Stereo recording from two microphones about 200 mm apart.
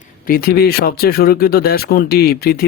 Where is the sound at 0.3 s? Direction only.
45° left (ahead or behind).